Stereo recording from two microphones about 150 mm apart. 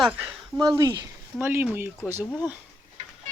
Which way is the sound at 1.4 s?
15° right (ahead or behind).